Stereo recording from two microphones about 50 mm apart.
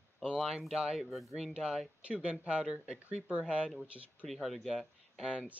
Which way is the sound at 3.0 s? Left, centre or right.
Right.